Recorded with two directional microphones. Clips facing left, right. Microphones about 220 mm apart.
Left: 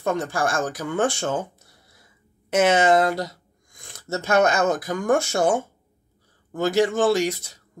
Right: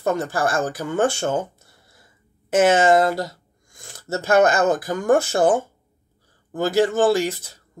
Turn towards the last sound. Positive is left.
turn(degrees=-5)  # may be behind; listen again after turning